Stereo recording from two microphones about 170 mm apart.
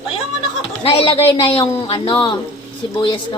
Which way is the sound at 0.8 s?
35° left (ahead or behind).